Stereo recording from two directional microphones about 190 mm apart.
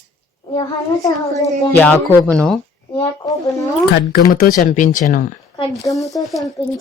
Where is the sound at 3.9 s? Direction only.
55° left (ahead or behind).